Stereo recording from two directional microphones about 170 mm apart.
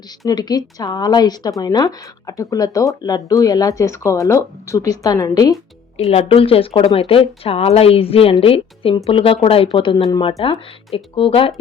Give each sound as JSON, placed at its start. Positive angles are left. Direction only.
{"t": 0.3, "sound": "speech", "side_deg": 25}
{"t": 6.1, "sound": "speech", "side_deg": 35}